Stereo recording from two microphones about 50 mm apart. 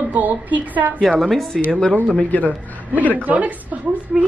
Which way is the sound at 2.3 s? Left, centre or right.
Left.